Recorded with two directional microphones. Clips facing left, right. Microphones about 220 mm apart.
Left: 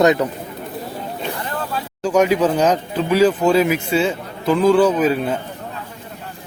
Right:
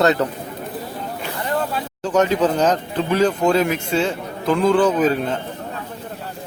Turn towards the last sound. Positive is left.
turn(degrees=10)  # may be behind; listen again after turning